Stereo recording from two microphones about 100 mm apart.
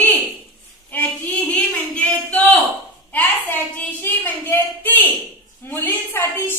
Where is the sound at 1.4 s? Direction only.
10° left (ahead or behind).